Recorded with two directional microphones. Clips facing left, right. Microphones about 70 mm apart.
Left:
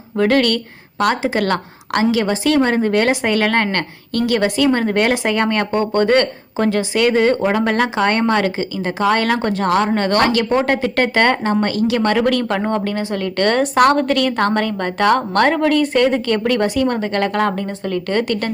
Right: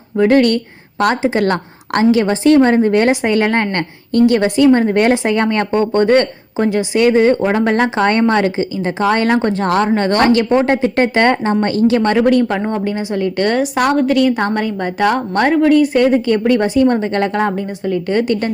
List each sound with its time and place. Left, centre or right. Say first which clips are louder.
0.2 s a woman's voice: right 4 dB; right
13.5 s a woman's voice: left 4 dB; centre; by 18.5 s right